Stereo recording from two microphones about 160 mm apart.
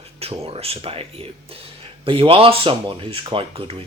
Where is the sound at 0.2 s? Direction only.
40° right (ahead or behind).